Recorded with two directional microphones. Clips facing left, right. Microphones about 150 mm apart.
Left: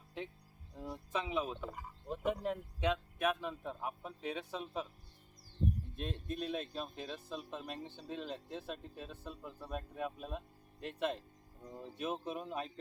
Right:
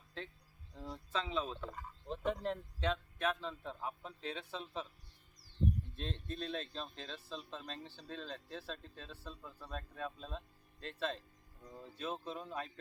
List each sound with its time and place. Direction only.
0.2 s speech: 15° left (ahead or behind)
6.0 s speech: 10° left (ahead or behind)